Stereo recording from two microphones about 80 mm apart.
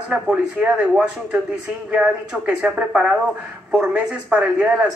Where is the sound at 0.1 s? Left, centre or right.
Centre.